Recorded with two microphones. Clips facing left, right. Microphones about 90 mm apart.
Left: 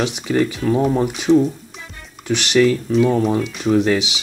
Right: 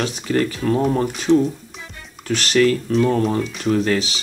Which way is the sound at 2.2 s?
15° left (ahead or behind).